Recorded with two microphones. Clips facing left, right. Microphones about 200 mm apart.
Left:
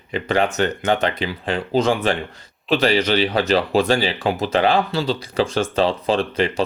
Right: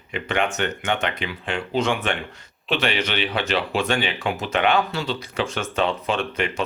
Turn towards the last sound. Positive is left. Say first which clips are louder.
# left 5 dB
turn(degrees=35)  # may be behind; listen again after turning